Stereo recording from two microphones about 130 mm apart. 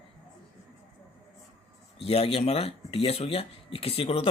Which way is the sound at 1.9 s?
50° left (ahead or behind).